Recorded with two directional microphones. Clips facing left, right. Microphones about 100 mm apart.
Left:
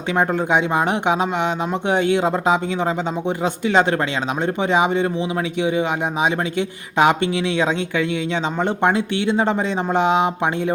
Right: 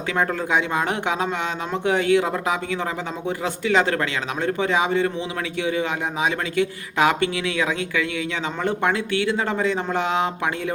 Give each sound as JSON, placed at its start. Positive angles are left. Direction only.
{"t": 0.2, "sound": "speech", "side_deg": 20}